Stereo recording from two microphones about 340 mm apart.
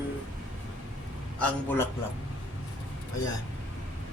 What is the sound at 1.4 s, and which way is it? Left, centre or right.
Speech, centre.